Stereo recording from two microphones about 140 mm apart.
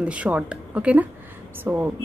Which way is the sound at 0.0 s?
10° right (ahead or behind).